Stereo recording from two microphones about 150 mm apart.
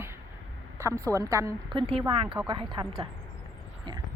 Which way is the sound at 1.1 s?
20° right (ahead or behind).